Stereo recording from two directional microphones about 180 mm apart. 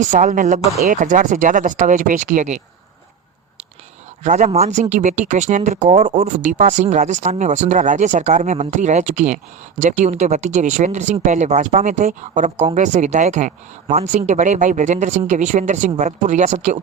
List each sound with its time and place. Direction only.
0.0 s speech: 45° right (ahead or behind)
4.2 s speech: 40° right (ahead or behind)